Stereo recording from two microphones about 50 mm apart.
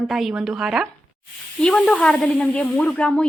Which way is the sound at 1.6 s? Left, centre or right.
Centre.